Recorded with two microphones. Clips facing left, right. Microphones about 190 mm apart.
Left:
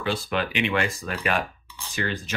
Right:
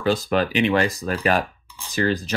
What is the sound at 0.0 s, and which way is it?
Speech, 40° right (ahead or behind).